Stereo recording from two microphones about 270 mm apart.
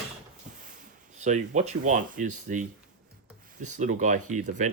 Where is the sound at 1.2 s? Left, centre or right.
Right.